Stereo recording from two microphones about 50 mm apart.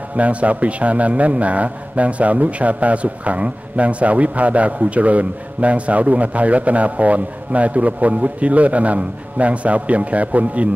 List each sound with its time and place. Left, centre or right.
0.1 s a man's voice: right